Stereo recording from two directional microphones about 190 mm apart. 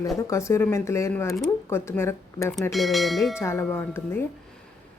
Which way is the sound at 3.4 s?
15° left (ahead or behind).